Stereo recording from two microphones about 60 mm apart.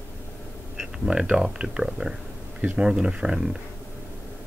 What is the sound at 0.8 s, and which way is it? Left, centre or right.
Speech, centre.